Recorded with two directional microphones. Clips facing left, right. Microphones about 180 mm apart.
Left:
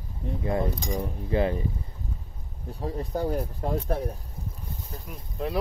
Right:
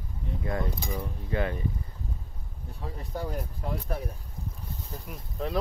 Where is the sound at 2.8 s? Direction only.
35° left (ahead or behind).